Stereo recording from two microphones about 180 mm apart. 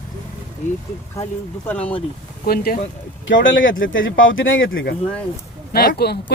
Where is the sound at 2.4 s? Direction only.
55° left (ahead or behind).